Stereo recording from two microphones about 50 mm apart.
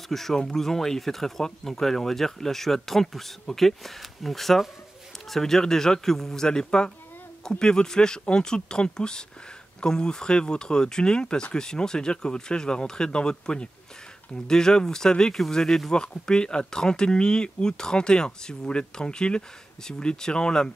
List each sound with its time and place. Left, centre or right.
0.1 s speech: centre